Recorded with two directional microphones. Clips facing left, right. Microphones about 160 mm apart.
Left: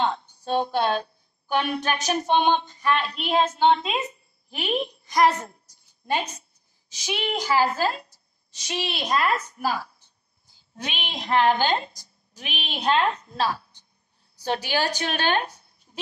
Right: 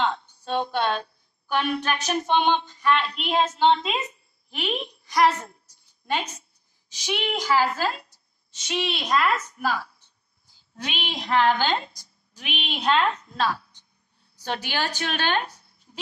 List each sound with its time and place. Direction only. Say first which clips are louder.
0.0 s speech: left 1 dB; 35° left (ahead or behind)
1.8 s music: left 1 dB; 40° left (ahead or behind)
3.0 s a woman's voice: left 1 dB; 5° left (ahead or behind)
5.0 s a woman's voice: right 1 dB; 45° left (ahead or behind)
7.0 s music: right 1 dB; 45° left (ahead or behind)
7.5 s a woman's voice: left 1 dB; 40° left (ahead or behind)
10.8 s a woman's voice: right 1 dB; 25° left (ahead or behind)
12.4 s a woman's voice: right 1 dB; 40° left (ahead or behind)